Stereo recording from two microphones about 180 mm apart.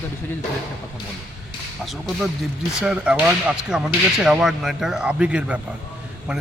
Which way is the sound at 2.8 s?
5° right (ahead or behind).